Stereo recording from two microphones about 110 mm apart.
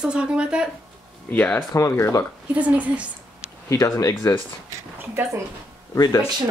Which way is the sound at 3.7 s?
30° left (ahead or behind).